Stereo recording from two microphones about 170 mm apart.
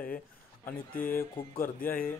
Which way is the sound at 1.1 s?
15° left (ahead or behind).